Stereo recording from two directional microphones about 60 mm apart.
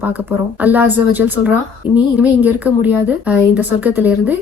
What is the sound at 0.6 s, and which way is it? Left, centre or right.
Speech, right.